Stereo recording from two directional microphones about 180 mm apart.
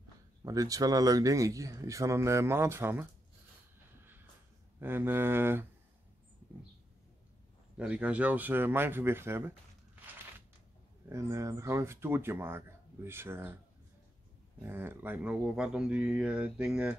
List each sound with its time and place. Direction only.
0.4 s speech: 20° right (ahead or behind)
4.7 s speech: 10° right (ahead or behind)
7.7 s speech: 5° right (ahead or behind)
11.1 s speech: 15° right (ahead or behind)
14.6 s speech: 10° right (ahead or behind)